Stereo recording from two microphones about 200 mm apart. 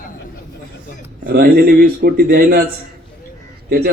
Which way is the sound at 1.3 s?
50° right (ahead or behind).